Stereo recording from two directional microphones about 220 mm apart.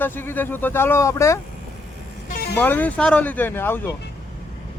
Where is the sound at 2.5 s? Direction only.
10° left (ahead or behind).